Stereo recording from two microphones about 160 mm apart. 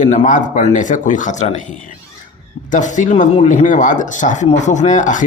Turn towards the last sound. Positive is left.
turn(degrees=50)  # may be behind; listen again after turning